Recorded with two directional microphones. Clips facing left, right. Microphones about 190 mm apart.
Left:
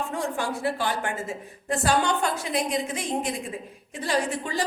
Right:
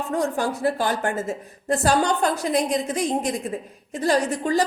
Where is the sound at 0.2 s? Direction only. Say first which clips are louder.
Right 6 dB; 40° right (ahead or behind).